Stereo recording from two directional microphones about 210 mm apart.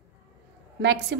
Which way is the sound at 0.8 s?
55° right (ahead or behind).